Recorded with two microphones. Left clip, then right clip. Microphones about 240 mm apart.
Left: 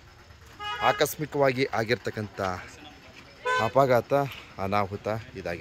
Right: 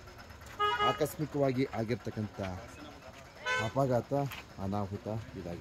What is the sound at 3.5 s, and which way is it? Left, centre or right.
Speech, left.